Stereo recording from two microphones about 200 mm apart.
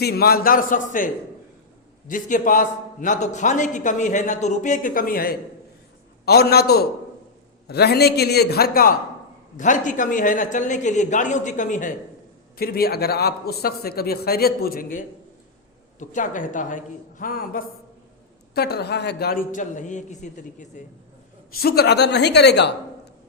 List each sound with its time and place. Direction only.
0.0 s a man's voice: 50° left (ahead or behind)
12.5 s a man's voice: 50° left (ahead or behind)
21.6 s speech: 50° left (ahead or behind)